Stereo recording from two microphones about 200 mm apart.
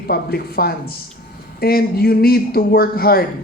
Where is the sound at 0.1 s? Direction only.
50° left (ahead or behind).